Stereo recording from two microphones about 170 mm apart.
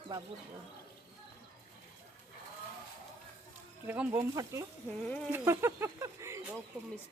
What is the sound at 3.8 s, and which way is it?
A child's voice, 10° right (ahead or behind).